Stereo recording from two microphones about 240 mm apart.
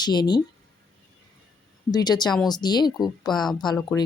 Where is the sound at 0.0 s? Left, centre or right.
Centre.